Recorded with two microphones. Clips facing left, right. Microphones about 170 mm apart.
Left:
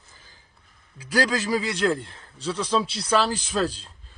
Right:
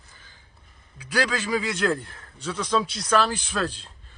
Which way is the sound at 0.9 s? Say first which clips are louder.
Left 2 dB; 35° left (ahead or behind).